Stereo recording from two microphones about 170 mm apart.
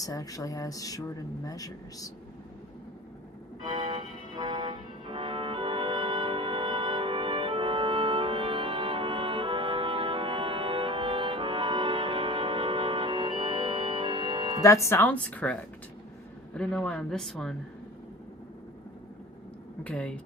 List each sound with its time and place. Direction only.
0.0 s speech: 20° left (ahead or behind)
3.6 s music: 25° right (ahead or behind)
14.6 s speech: 20° left (ahead or behind)
16.6 s speech: 5° left (ahead or behind)
19.8 s speech: 10° left (ahead or behind)